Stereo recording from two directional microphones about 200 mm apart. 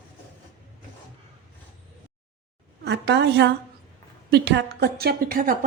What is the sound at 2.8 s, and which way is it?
A woman's voice, 60° right (ahead or behind).